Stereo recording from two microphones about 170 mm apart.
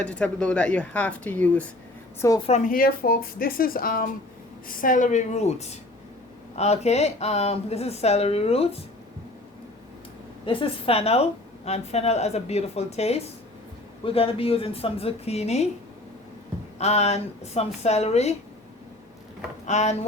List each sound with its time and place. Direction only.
0.0 s speech: 5° left (ahead or behind)
2.4 s a woman's voice: 45° left (ahead or behind)
10.4 s a woman's voice: 30° left (ahead or behind)
16.7 s a woman's voice: 40° left (ahead or behind)
19.6 s a woman's voice: 40° left (ahead or behind)